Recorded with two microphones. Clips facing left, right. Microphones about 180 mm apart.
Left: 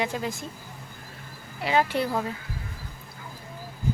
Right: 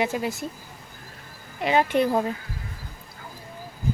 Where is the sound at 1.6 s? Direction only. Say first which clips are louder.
Right 2 dB; 20° right (ahead or behind).